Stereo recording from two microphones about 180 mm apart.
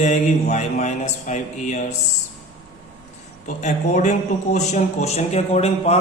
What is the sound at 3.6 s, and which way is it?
A man's voice, 40° left (ahead or behind).